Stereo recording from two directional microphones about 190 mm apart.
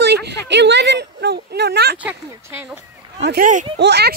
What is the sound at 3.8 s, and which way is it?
Speech, 60° right (ahead or behind).